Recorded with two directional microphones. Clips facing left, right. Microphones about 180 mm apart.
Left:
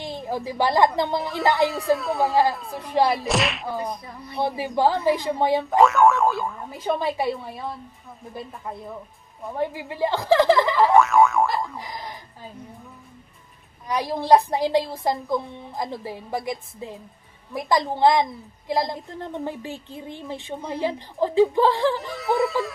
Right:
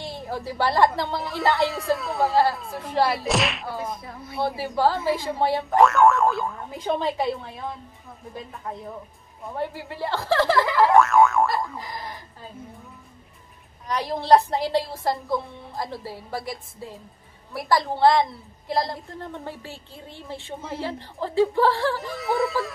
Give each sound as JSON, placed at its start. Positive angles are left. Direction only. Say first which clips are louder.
{"t": 0.0, "sound": "a woman's voice", "louder": "left 3 dB", "side_deg": 15}
{"t": 1.7, "sound": "speech", "louder": "left 3 dB", "side_deg": 0}
{"t": 2.9, "sound": "a woman's voice", "louder": "left 2 dB", "side_deg": 15}
{"t": 3.3, "sound": "speech", "louder": "left 1 dB", "side_deg": 0}
{"t": 4.4, "sound": "a woman's voice", "louder": "left 1 dB", "side_deg": 15}
{"t": 5.7, "sound": "speech", "louder": "right 1 dB", "side_deg": 0}
{"t": 9.6, "sound": "a woman's voice", "louder": "left 5 dB", "side_deg": 15}
{"t": 11.0, "sound": "boing", "louder": "even", "side_deg": 0}
{"t": 13.8, "sound": "a woman's voice", "louder": "left 1 dB", "side_deg": 10}
{"t": 22.0, "sound": "speech", "louder": "left 2 dB", "side_deg": 0}